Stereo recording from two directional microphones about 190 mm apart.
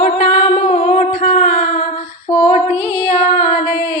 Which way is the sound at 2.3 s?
35° left (ahead or behind).